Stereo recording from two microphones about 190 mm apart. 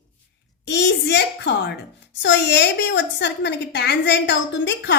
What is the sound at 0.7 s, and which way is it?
A woman's voice, 65° left (ahead or behind).